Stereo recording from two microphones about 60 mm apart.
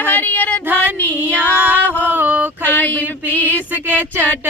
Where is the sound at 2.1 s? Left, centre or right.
Right.